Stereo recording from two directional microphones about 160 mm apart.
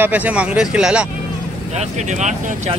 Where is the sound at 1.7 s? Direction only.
45° right (ahead or behind).